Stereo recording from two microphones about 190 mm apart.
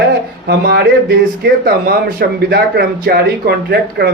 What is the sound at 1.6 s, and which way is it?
Speech, 55° right (ahead or behind).